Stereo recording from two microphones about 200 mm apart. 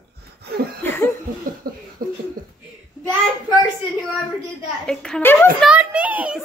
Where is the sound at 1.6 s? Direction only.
50° right (ahead or behind).